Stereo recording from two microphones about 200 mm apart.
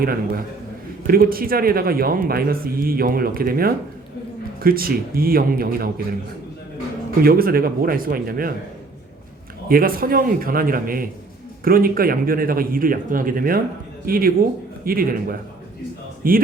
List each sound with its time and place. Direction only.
0.0 s a man's voice: 45° right (ahead or behind)
7.2 s a man's voice: 45° right (ahead or behind)
9.6 s a man's voice: 45° right (ahead or behind)